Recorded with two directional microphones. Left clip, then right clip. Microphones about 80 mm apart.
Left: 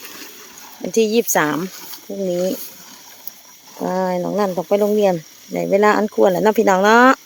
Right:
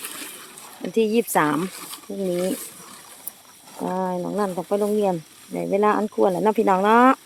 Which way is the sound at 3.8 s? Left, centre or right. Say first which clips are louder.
Left 6 dB; left.